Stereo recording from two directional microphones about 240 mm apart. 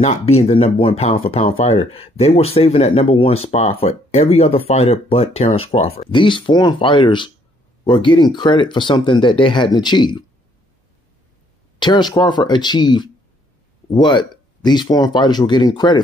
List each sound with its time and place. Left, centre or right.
0.0 s speech: left
11.8 s speech: centre